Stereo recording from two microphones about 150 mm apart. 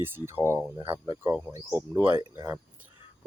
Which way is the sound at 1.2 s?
10° right (ahead or behind).